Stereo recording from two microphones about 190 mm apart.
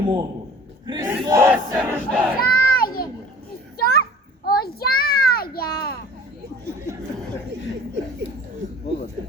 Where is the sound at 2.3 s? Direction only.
50° left (ahead or behind).